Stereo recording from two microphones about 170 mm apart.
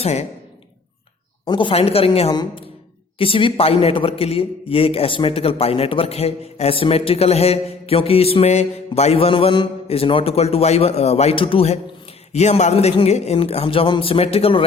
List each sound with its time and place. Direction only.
0.0 s a man's voice: 40° left (ahead or behind)
1.5 s a man's voice: 30° left (ahead or behind)